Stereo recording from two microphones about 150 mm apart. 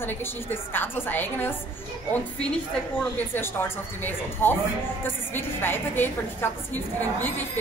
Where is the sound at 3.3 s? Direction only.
15° left (ahead or behind).